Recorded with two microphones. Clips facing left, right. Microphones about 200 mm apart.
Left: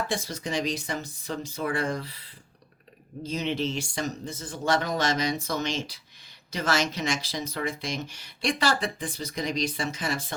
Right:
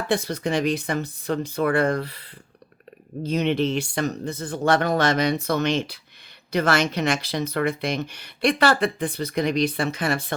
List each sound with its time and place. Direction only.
0.1 s speech: 60° right (ahead or behind)